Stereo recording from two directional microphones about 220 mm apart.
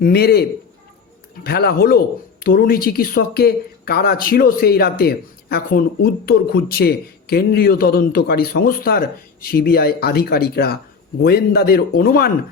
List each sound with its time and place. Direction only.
0.0 s speech: 45° left (ahead or behind)
1.5 s speech: 45° left (ahead or behind)